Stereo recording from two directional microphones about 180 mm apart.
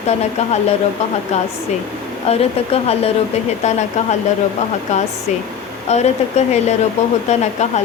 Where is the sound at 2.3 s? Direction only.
35° left (ahead or behind).